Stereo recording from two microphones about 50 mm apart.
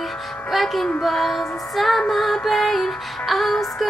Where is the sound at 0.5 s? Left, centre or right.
Centre.